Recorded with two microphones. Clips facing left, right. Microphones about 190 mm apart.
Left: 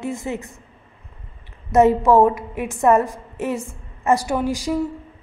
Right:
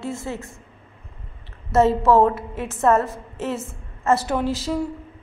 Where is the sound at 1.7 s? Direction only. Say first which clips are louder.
Left 2 dB; 15° left (ahead or behind).